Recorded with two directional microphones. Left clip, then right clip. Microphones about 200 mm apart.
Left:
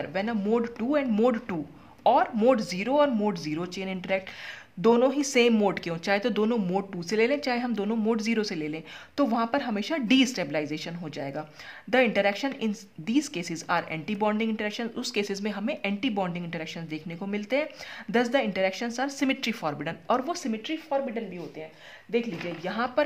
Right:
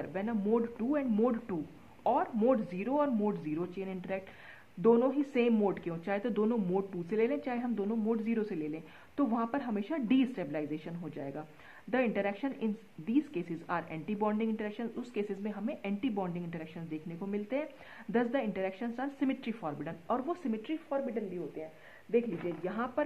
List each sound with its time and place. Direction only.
0.0 s speech: 25° left (ahead or behind)
20.4 s speech: 15° left (ahead or behind)
22.7 s speech: 25° left (ahead or behind)